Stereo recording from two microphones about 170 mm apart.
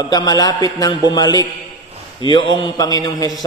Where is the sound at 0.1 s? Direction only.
20° left (ahead or behind).